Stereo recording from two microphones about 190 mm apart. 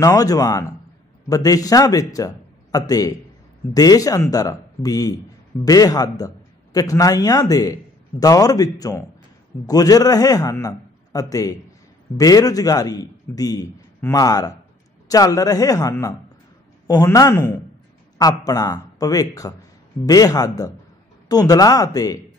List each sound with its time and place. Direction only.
0.0 s a man's voice: 20° left (ahead or behind)